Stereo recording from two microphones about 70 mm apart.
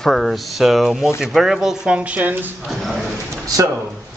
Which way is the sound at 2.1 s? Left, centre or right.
Right.